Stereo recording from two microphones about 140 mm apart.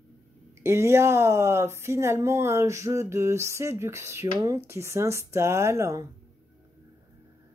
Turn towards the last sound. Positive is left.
turn(degrees=-20)  # may be behind; listen again after turning